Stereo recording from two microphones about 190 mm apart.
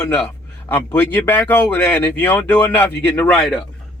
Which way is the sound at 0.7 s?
10° left (ahead or behind).